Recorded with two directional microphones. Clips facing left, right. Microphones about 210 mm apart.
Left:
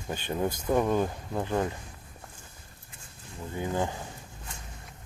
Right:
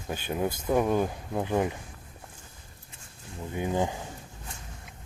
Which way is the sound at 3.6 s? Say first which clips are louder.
Right 2 dB; 15° right (ahead or behind).